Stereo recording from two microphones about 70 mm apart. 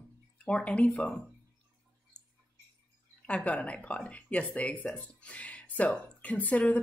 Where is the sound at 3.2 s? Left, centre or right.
Centre.